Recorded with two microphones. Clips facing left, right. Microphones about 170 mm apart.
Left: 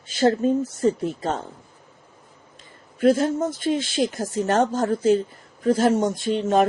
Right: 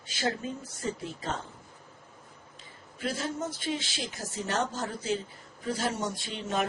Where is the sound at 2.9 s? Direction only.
50° left (ahead or behind).